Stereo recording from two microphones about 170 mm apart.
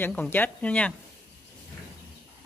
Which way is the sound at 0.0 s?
10° left (ahead or behind).